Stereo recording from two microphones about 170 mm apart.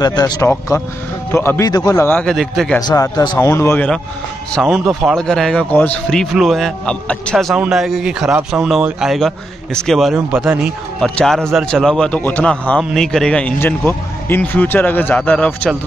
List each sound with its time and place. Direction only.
0.0 s a man's voice: 25° left (ahead or behind); by 2.8 s centre (ahead or behind)
2.8 s a man's voice: 20° left (ahead or behind)